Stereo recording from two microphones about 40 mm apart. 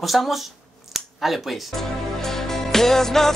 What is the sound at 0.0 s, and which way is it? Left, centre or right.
Speech, centre.